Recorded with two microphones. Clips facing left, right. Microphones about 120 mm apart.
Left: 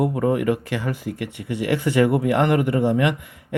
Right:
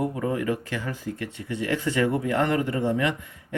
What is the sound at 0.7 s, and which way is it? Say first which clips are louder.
Speech: left 5 dB; 70° left (ahead or behind).